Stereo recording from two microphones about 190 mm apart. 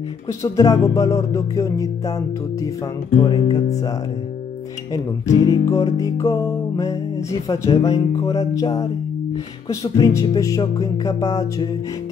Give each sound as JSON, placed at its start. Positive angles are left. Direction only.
{"t": 0.3, "sound": "music", "side_deg": 20}
{"t": 4.9, "sound": "music", "side_deg": 20}
{"t": 9.7, "sound": "music", "side_deg": 15}